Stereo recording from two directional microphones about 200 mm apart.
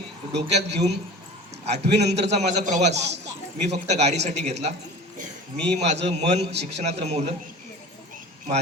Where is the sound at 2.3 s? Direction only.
35° right (ahead or behind).